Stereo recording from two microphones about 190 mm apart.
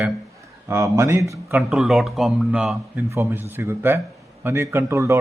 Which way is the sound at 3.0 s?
15° right (ahead or behind).